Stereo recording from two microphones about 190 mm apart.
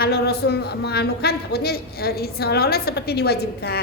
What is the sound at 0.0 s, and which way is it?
A woman's voice, 55° left (ahead or behind).